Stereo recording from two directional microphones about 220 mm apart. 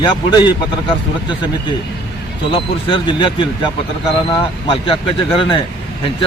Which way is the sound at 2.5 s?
20° left (ahead or behind).